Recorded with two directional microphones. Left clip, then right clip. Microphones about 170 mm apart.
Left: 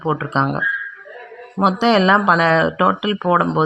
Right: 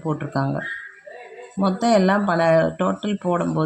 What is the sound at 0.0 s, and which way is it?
Speech, 55° left (ahead or behind).